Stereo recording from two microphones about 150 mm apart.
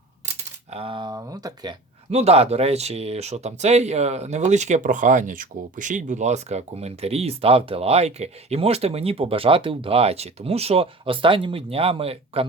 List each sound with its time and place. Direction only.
0.7 s speech: 40° right (ahead or behind)
2.0 s speech: 45° right (ahead or behind)